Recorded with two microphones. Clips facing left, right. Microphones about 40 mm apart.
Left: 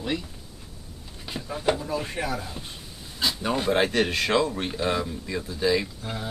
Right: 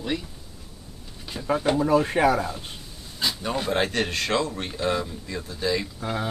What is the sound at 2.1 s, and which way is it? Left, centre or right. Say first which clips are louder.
Speech: right 9 dB; right.